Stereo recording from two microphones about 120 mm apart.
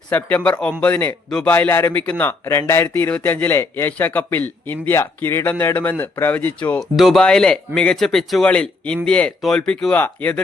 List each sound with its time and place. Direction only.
0.1 s speech: 15° left (ahead or behind)
6.9 s speech: centre (ahead or behind)